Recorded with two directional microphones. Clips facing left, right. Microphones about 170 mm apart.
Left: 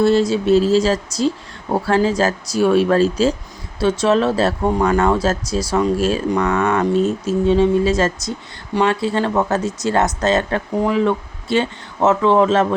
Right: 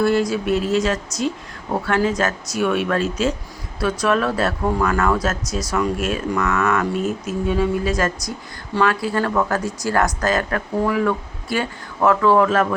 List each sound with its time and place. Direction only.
0.0 s speech: 25° left (ahead or behind)